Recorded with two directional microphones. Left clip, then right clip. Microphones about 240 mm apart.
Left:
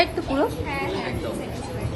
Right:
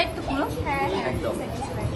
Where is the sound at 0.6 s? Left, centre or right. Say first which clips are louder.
Right 2 dB; centre.